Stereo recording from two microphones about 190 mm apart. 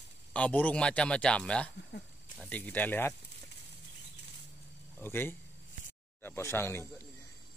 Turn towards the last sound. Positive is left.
turn(degrees=15)  # may be behind; listen again after turning